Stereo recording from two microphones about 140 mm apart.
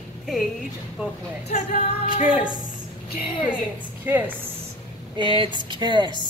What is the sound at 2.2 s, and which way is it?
Speech, 10° right (ahead or behind).